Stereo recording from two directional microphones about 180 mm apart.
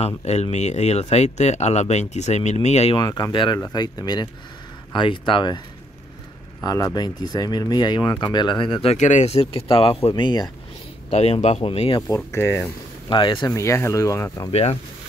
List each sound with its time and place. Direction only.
0.0 s speech: 35° left (ahead or behind)
3.0 s speech: 20° left (ahead or behind)
6.6 s speech: 20° left (ahead or behind)
8.9 s speech: 40° left (ahead or behind); by 10.5 s 25° left (ahead or behind)
11.1 s speech: 35° left (ahead or behind)
12.3 s speech: 15° left (ahead or behind)
13.1 s speech: 25° left (ahead or behind)
14.5 s speech: 35° left (ahead or behind)